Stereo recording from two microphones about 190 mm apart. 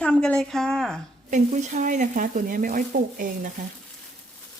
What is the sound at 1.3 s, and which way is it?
Speech, 40° right (ahead or behind).